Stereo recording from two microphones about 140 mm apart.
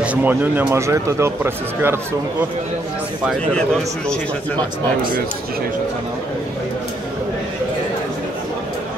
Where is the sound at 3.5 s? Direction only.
5° left (ahead or behind).